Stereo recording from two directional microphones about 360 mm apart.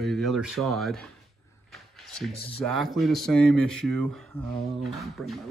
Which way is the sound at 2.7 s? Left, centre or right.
Centre.